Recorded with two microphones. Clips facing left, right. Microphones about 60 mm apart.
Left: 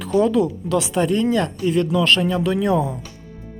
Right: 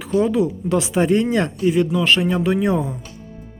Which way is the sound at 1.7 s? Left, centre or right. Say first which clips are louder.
Even; centre.